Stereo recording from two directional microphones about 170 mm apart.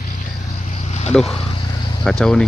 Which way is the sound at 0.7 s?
40° left (ahead or behind).